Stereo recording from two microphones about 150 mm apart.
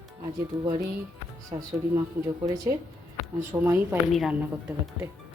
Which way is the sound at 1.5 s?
30° right (ahead or behind).